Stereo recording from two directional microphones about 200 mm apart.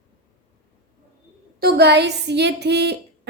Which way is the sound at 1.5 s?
55° right (ahead or behind).